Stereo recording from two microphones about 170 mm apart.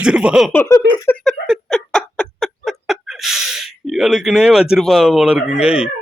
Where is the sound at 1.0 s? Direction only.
10° left (ahead or behind).